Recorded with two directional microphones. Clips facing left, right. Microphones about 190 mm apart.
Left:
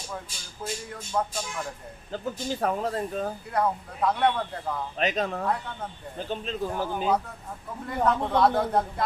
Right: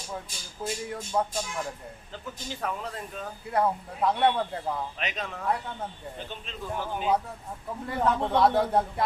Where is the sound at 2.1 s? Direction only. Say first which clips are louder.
Left 9 dB; 40° left (ahead or behind).